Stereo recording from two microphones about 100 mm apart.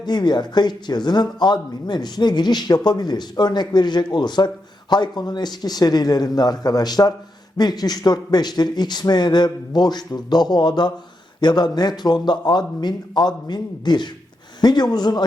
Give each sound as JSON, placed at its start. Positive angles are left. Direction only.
{"t": 0.0, "sound": "a man's voice", "side_deg": 45}